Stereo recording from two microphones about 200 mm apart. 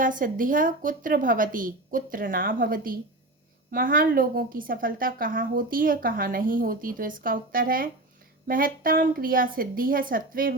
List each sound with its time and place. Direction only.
0.0 s a woman's voice: 45° right (ahead or behind)